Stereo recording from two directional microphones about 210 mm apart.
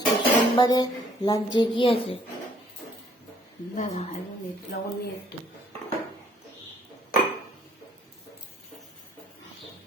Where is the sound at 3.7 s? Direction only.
35° left (ahead or behind).